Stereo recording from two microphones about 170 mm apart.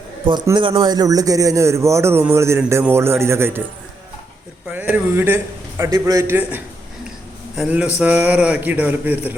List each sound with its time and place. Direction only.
0.4 s a man's voice: 20° right (ahead or behind)
4.7 s a man's voice: 10° right (ahead or behind)